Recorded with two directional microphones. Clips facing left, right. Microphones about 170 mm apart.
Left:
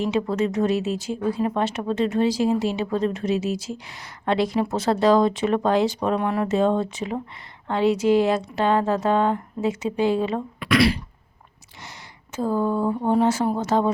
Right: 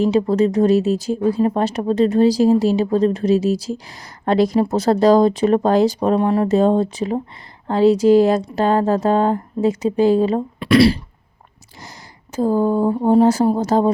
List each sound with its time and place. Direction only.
0.0 s speech: 35° right (ahead or behind)